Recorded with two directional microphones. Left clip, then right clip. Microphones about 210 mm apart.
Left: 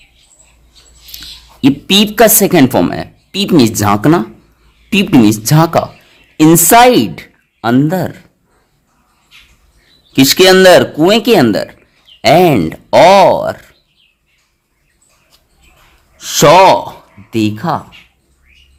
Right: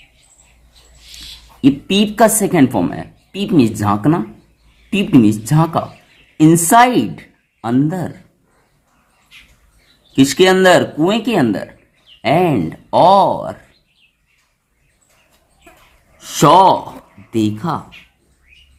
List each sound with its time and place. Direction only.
1.6 s a woman's voice: 40° left (ahead or behind)
10.1 s speech: 40° left (ahead or behind)
16.1 s speech: 35° left (ahead or behind)